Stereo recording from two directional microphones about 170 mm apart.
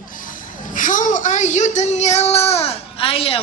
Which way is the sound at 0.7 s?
50° left (ahead or behind).